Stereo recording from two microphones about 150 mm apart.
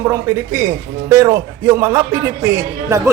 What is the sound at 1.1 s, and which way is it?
A man's voice, 20° right (ahead or behind).